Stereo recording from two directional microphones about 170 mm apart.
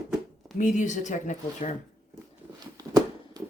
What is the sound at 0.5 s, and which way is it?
Speech, 50° left (ahead or behind).